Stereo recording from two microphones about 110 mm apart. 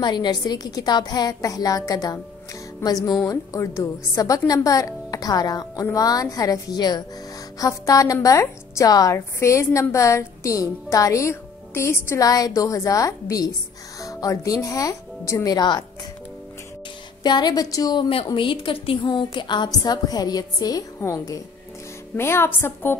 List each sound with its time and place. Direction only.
0.0 s a woman's voice: 40° left (ahead or behind)
17.2 s a woman's voice: 40° left (ahead or behind)
18.1 s a woman's voice: 50° left (ahead or behind); by 22.9 s 20° left (ahead or behind)